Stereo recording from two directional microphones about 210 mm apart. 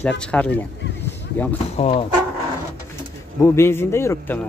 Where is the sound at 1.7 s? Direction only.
30° left (ahead or behind).